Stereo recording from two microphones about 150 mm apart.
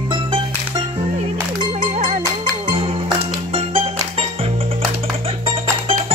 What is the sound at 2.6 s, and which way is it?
Music, 35° right (ahead or behind).